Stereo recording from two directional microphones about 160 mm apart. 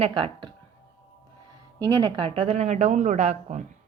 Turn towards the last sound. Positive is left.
turn(degrees=-50)  # may be behind; listen again after turning